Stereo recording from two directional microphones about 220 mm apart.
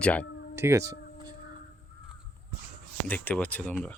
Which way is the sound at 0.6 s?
10° right (ahead or behind).